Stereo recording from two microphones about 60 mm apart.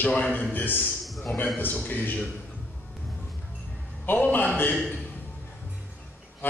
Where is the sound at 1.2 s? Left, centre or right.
Left.